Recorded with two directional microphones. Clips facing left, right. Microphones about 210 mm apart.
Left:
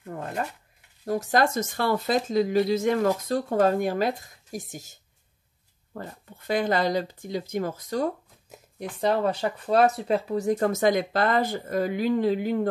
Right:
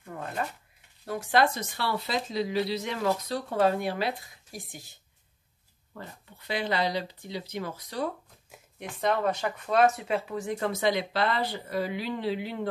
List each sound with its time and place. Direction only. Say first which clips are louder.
1.0 s speech: left 2 dB; 40° left (ahead or behind)
5.9 s speech: left 6 dB; 45° left (ahead or behind)